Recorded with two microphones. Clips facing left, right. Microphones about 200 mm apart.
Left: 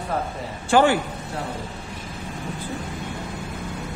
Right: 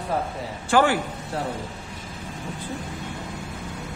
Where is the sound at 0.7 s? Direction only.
25° left (ahead or behind).